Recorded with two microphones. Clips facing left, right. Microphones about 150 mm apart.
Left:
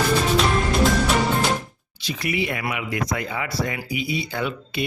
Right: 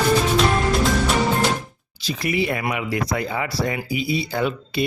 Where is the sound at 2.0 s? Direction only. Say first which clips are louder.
Right 3 dB; 35° right (ahead or behind).